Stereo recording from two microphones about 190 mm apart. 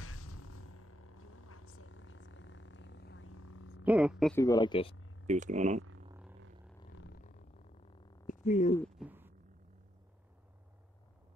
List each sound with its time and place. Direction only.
1.7 s vehicle: 90° left
3.8 s speech: 5° right (ahead or behind)
4.4 s speech: 20° left (ahead or behind)
5.2 s speech: 40° right (ahead or behind)
8.3 s a sound: 40° left (ahead or behind)
8.9 s a sound: 10° right (ahead or behind)